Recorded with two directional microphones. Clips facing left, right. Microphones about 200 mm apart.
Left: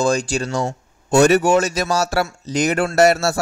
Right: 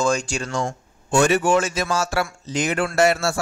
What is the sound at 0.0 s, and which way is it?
Speech, 35° left (ahead or behind).